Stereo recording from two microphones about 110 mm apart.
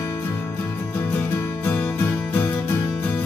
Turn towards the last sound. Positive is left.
turn(degrees=20)  # may be behind; listen again after turning